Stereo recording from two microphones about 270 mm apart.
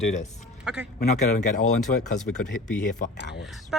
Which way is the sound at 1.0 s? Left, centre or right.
Left.